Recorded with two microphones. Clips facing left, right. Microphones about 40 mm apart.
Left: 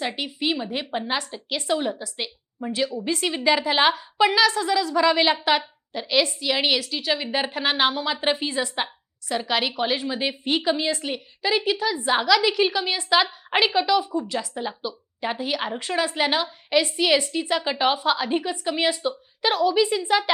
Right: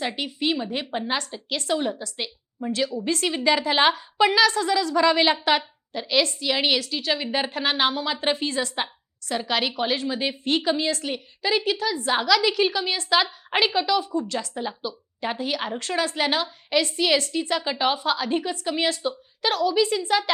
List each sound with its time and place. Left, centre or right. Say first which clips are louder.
0.0 s a woman's voice: even; centre